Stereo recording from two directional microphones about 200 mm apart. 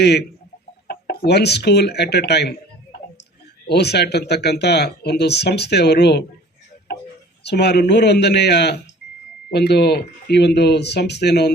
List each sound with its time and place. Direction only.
0.0 s speech: 55° left (ahead or behind)
3.7 s speech: 55° left (ahead or behind)
7.4 s speech: 55° left (ahead or behind)